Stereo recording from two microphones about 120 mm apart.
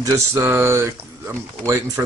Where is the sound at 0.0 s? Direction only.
25° right (ahead or behind).